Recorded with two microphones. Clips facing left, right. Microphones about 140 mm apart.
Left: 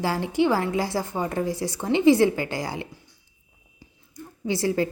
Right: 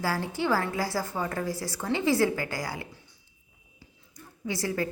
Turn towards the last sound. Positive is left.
turn(degrees=25)  # may be behind; listen again after turning